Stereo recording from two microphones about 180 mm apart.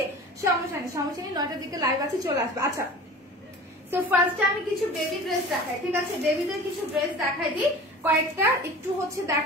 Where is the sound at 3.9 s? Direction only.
10° right (ahead or behind).